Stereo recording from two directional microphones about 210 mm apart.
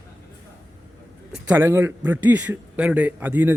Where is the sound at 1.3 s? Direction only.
10° right (ahead or behind).